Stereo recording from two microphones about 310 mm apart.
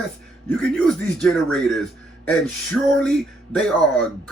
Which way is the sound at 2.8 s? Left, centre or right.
Centre.